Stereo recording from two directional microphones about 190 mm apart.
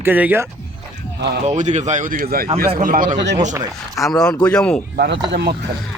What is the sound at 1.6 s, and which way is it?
Speech, 40° right (ahead or behind).